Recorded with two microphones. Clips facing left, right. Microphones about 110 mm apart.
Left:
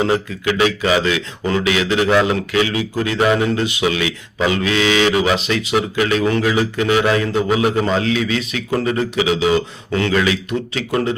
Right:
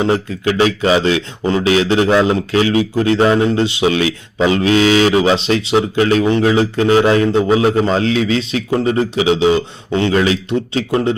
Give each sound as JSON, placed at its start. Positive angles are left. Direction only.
{"t": 0.0, "sound": "a man's voice", "side_deg": -30}